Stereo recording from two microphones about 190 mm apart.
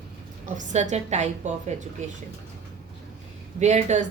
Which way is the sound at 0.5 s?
40° right (ahead or behind).